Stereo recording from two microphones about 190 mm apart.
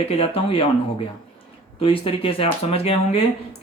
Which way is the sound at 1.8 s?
30° left (ahead or behind).